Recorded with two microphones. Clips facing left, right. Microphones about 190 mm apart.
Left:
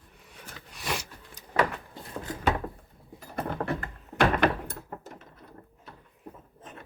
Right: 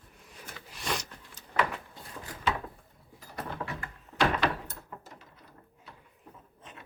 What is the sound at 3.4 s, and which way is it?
Door, 55° left (ahead or behind).